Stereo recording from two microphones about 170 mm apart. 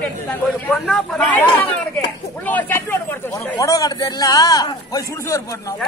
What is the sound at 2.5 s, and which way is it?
A man's voice, 10° left (ahead or behind).